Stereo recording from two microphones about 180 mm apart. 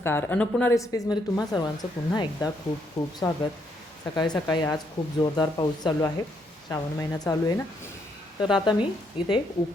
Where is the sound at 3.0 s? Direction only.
40° left (ahead or behind).